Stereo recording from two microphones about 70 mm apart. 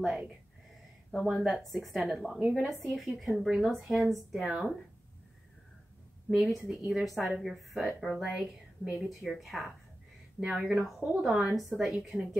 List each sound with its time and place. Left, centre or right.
1.2 s speech: centre
6.3 s a woman's voice: centre